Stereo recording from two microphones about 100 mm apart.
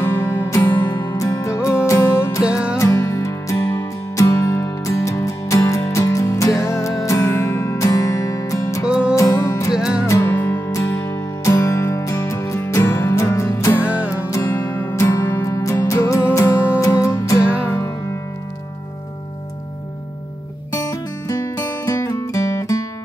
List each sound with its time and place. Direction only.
0.0 s music: 20° left (ahead or behind)
0.8 s music: 40° left (ahead or behind)
2.4 s music: 10° right (ahead or behind)
2.8 s music: 30° left (ahead or behind)
9.8 s music: 5° right (ahead or behind)
10.2 s music: 20° left (ahead or behind)
13.8 s music: 10° right (ahead or behind)
14.3 s music: 30° left (ahead or behind)
14.6 s music: 20° left (ahead or behind)
17.4 s music: 10° right (ahead or behind)
17.6 s music: 25° left (ahead or behind)
20.7 s music: 35° left (ahead or behind)